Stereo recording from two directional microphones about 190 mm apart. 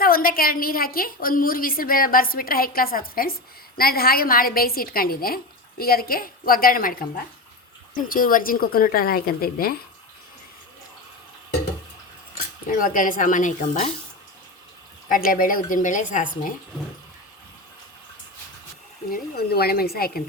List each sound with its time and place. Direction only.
0.0 s a woman's voice: 50° left (ahead or behind)
12.7 s a woman's voice: 45° left (ahead or behind)
15.1 s a woman's voice: 45° left (ahead or behind)
19.1 s a woman's voice: 55° left (ahead or behind)